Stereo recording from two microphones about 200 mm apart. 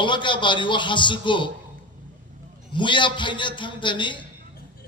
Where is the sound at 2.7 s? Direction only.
25° left (ahead or behind).